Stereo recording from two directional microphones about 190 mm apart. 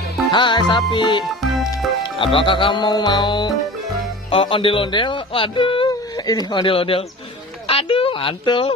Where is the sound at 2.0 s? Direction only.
25° left (ahead or behind).